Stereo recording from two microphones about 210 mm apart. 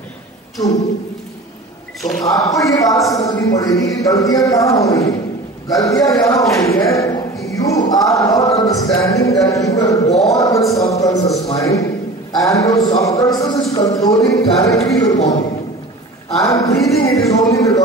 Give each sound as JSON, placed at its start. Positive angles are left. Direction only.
{"t": 2.2, "sound": "a man's voice", "side_deg": 15}
{"t": 10.2, "sound": "a sound", "side_deg": 15}
{"t": 10.7, "sound": "a man's voice", "side_deg": 15}
{"t": 16.4, "sound": "a man's voice", "side_deg": 15}